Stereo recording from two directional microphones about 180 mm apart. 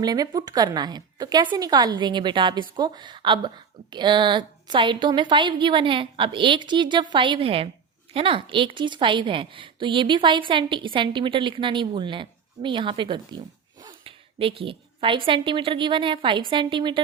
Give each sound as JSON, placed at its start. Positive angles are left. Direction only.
{"t": 0.0, "sound": "a woman's voice", "side_deg": -20}